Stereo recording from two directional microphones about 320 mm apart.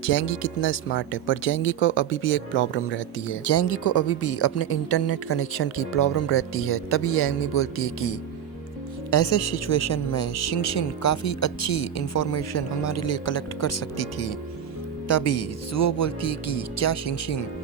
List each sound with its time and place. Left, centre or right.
0.0 s a woman's voice: left